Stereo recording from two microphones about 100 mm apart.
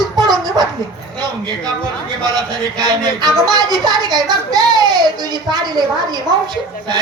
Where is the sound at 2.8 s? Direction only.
45° right (ahead or behind).